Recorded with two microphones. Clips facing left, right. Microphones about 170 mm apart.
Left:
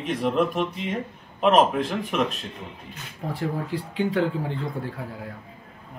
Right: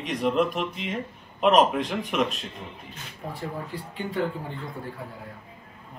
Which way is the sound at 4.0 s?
90° left.